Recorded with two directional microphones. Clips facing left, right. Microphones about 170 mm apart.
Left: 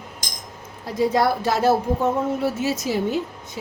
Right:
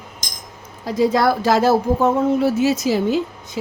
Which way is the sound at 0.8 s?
90° right.